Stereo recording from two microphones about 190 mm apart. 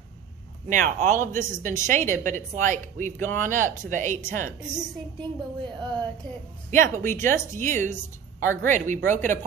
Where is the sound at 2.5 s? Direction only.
40° right (ahead or behind).